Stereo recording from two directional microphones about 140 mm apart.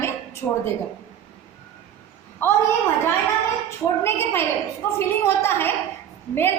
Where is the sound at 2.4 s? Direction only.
20° left (ahead or behind).